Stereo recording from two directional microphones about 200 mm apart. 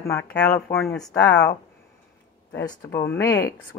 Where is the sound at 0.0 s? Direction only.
10° left (ahead or behind).